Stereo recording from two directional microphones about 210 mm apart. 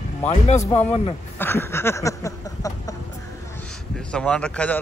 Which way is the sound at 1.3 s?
10° left (ahead or behind).